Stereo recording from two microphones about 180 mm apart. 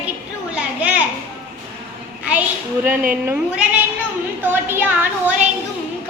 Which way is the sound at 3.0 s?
10° right (ahead or behind).